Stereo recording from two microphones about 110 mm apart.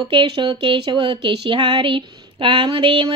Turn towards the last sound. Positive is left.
turn(degrees=-55)  # may be behind; listen again after turning